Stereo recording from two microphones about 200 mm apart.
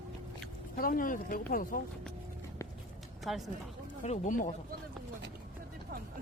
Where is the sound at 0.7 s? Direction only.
45° left (ahead or behind).